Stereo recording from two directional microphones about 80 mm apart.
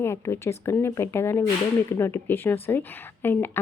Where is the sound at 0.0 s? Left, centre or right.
Left.